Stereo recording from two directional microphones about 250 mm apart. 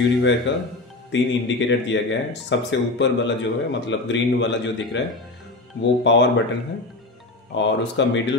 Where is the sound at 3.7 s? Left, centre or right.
Left.